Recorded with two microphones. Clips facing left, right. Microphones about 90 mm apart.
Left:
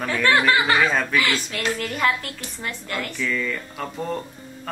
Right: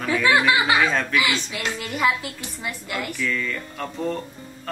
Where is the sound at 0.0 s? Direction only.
5° right (ahead or behind).